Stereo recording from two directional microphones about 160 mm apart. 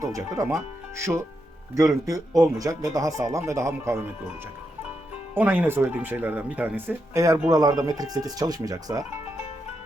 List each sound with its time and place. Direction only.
0.0 s speech: 20° right (ahead or behind)
5.3 s speech: 10° right (ahead or behind)